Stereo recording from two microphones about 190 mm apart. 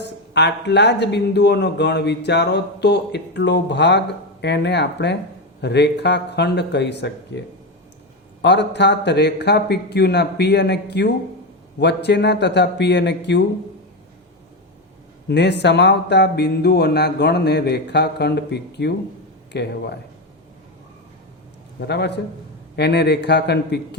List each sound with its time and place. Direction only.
0.0 s a man's voice: 65° left (ahead or behind)
15.3 s a man's voice: 65° left (ahead or behind)
21.8 s a man's voice: 60° left (ahead or behind)